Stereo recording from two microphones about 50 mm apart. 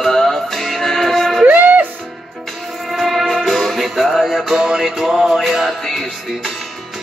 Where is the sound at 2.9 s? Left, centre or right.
Centre.